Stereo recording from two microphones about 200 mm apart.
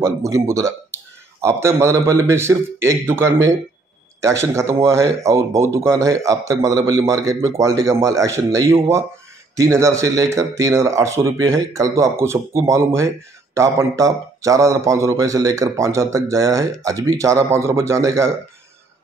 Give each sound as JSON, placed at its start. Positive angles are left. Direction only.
{"t": 0.0, "sound": "a man's voice", "side_deg": -15}